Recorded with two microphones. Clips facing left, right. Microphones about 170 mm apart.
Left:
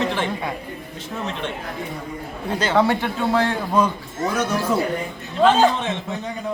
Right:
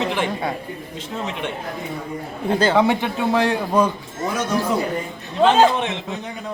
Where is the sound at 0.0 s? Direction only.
15° right (ahead or behind).